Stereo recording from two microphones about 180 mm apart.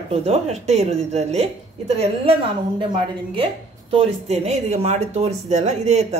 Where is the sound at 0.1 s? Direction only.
35° right (ahead or behind).